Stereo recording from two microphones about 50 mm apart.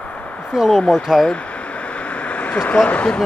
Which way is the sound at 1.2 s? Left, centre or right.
Left.